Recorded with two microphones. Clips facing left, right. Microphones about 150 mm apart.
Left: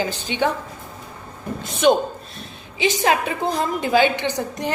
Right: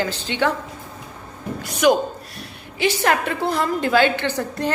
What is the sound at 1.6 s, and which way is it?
A man's voice, 25° left (ahead or behind).